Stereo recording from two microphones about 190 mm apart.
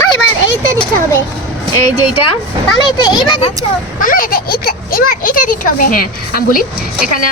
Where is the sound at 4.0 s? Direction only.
45° left (ahead or behind).